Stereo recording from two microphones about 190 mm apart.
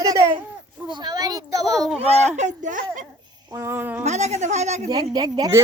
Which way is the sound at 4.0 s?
35° right (ahead or behind).